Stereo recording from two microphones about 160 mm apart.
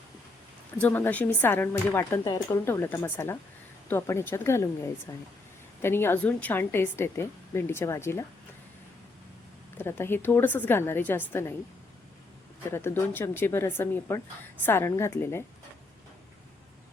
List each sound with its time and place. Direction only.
0.8 s speech: 10° left (ahead or behind)
9.7 s speech: 15° left (ahead or behind)
12.7 s speech: 15° left (ahead or behind)